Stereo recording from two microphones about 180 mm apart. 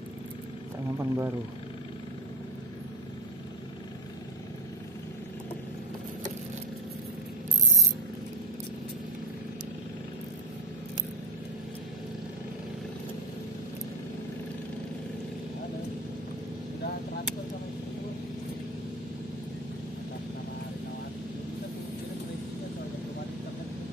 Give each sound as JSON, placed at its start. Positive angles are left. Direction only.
{"t": 0.9, "sound": "speech", "side_deg": -15}